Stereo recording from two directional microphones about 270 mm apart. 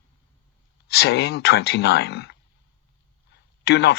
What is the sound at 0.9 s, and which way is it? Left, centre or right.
Speech, left.